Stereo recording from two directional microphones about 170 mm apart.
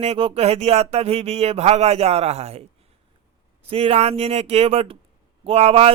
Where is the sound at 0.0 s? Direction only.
35° right (ahead or behind).